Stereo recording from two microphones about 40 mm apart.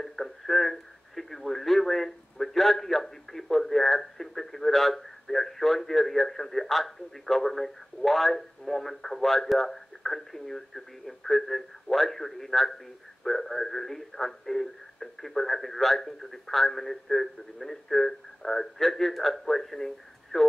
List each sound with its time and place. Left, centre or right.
0.0 s radio: centre
20.3 s radio: left